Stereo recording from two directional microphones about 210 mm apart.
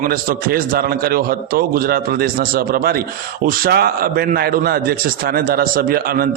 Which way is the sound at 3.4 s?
45° right (ahead or behind).